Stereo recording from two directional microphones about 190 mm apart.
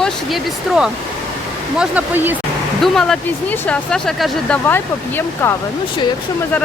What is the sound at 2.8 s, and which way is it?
Speech, 5° left (ahead or behind).